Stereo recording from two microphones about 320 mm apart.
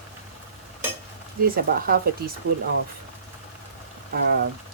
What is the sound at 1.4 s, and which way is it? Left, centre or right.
Speech, right.